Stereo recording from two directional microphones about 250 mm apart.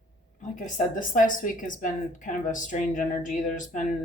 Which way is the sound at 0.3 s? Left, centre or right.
Left.